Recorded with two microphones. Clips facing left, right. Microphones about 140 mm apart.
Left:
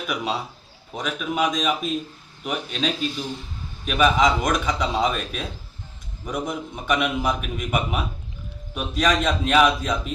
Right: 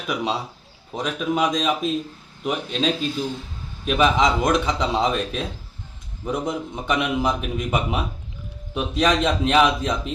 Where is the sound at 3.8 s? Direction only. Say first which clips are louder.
Even; 25° right (ahead or behind).